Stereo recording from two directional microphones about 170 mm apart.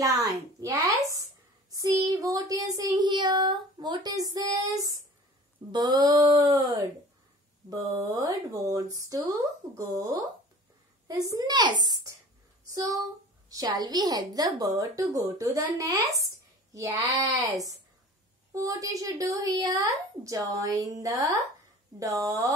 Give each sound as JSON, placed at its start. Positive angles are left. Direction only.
{"t": 0.0, "sound": "a woman's voice", "side_deg": -20}
{"t": 1.7, "sound": "child singing", "side_deg": -20}
{"t": 12.6, "sound": "speech", "side_deg": -20}
{"t": 13.5, "sound": "child singing", "side_deg": -20}